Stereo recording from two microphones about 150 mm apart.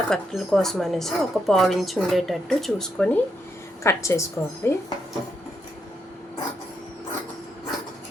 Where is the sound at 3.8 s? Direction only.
20° left (ahead or behind).